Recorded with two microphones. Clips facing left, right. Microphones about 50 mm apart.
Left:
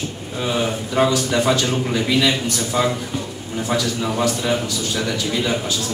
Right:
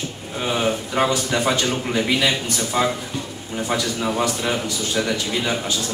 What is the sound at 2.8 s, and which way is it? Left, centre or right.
A man's voice, right.